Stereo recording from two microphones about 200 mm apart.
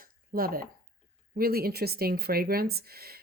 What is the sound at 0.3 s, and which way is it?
Speech, 45° right (ahead or behind).